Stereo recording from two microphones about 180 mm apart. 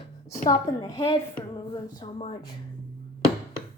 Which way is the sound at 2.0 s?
35° left (ahead or behind).